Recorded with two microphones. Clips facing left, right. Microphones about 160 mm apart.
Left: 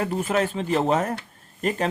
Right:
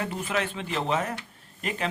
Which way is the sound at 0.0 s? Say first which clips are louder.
Left 6 dB; 45° left (ahead or behind).